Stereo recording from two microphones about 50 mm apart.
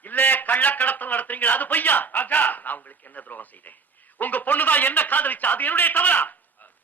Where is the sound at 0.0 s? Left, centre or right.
Left.